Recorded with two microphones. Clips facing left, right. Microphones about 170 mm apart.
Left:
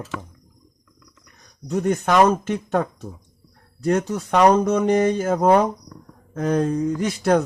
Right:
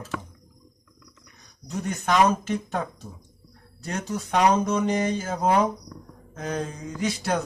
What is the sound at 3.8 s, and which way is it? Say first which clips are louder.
Speech: left 9 dB; 55° left (ahead or behind).